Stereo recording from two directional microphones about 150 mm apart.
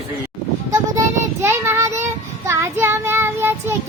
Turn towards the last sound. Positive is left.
turn(degrees=-15)  # may be behind; listen again after turning